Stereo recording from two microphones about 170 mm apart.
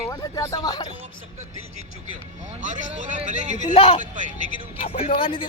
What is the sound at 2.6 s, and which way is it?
Speech, 45° right (ahead or behind).